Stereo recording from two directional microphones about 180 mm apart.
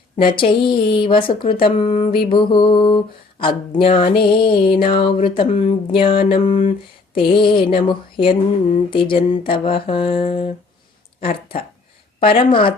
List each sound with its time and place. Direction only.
0.3 s a woman's voice: 30° left (ahead or behind)
9.6 s a sound: 30° left (ahead or behind)
12.2 s a woman's voice: 30° left (ahead or behind)